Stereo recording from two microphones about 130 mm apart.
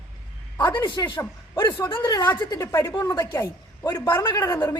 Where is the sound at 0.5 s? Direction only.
35° left (ahead or behind).